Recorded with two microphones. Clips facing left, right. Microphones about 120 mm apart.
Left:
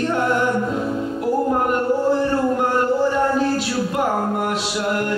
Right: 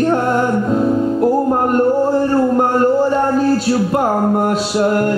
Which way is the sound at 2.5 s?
40° right (ahead or behind).